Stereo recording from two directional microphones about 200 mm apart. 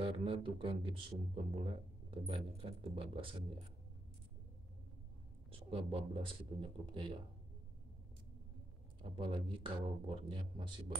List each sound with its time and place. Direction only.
0.0 s speech: 25° right (ahead or behind)
5.5 s speech: 25° right (ahead or behind)
9.0 s speech: 25° right (ahead or behind)